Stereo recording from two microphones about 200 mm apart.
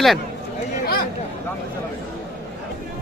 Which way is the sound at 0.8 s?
50° left (ahead or behind).